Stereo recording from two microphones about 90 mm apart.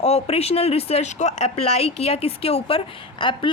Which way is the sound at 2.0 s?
90° left.